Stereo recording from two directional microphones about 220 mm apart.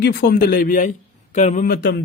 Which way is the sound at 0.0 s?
45° left (ahead or behind).